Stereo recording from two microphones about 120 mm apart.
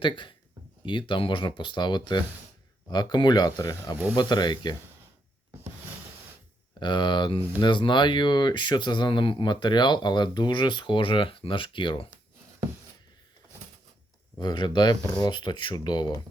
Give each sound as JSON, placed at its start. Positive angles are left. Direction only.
{"t": 0.0, "sound": "speech", "side_deg": 45}
{"t": 6.7, "sound": "speech", "side_deg": 40}
{"t": 14.3, "sound": "speech", "side_deg": 40}